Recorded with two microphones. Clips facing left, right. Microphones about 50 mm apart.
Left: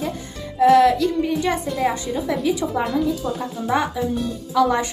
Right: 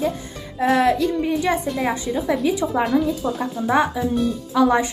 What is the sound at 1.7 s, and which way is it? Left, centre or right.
A woman's voice, centre.